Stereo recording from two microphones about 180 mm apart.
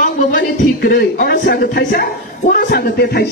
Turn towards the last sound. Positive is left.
turn(degrees=65)  # may be behind; listen again after turning